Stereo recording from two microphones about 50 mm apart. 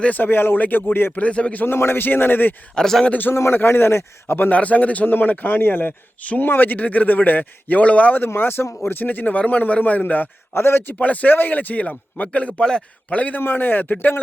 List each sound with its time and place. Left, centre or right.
0.0 s speech: left
1.1 s a man's voice: left
1.6 s a man's voice: left
2.7 s a man's voice: centre
3.1 s a man's voice: left
4.4 s a man's voice: left
6.2 s speech: left
8.2 s a man's voice: left
10.5 s speech: left
11.0 s a man's voice: left; by 13.1 s centre
13.1 s speech: left